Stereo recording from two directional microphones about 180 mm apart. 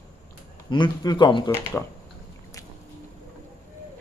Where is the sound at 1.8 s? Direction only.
10° left (ahead or behind).